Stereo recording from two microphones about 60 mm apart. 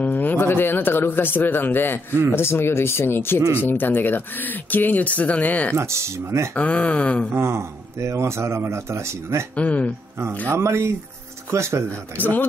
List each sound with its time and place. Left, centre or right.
0.0 s speech: left
5.8 s a man's voice: right
6.5 s speech: left
7.3 s a man's voice: right
9.6 s speech: left
10.5 s a man's voice: right
12.2 s speech: left